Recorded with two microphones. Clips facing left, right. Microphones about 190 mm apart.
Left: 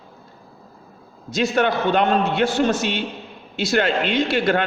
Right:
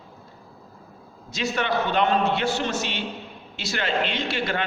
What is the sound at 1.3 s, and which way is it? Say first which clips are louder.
A man's voice: left 6 dB; 50° left (ahead or behind).